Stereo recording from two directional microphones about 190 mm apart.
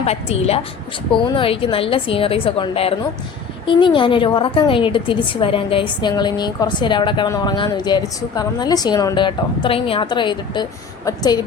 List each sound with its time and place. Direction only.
0.0 s a woman's voice: 35° left (ahead or behind)